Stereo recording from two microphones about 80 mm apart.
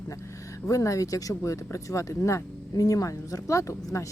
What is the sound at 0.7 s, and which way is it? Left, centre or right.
A man's voice, left.